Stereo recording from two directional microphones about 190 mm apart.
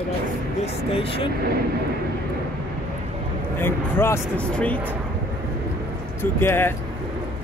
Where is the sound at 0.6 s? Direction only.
30° left (ahead or behind).